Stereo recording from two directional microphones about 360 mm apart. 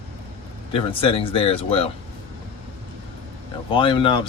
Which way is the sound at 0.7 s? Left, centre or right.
Centre.